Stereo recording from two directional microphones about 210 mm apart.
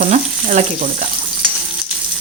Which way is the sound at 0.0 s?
35° right (ahead or behind).